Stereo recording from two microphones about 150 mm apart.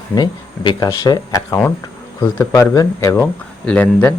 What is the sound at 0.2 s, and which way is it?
Speech, 30° left (ahead or behind).